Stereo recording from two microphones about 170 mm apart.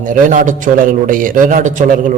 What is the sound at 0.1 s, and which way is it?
A man's voice, 50° right (ahead or behind).